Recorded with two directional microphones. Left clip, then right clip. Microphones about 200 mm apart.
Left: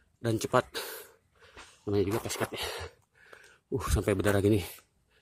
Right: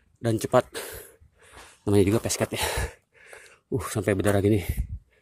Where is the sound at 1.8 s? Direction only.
50° right (ahead or behind).